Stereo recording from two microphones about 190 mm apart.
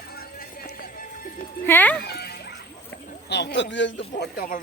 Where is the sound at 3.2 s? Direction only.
60° left (ahead or behind).